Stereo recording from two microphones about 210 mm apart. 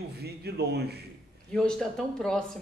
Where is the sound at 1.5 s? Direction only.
5° left (ahead or behind).